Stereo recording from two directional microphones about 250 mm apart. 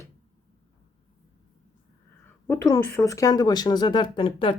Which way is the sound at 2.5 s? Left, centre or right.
Centre.